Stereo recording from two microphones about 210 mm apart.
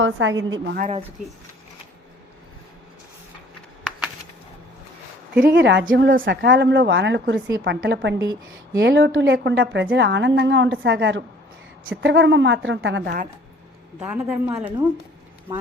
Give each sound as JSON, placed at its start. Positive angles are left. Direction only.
{"t": 0.0, "sound": "a woman's voice", "side_deg": -65}
{"t": 5.5, "sound": "a woman's voice", "side_deg": -55}
{"t": 14.0, "sound": "a woman's voice", "side_deg": -5}